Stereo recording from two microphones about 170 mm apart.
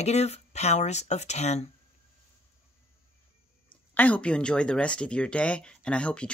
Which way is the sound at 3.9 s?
10° left (ahead or behind).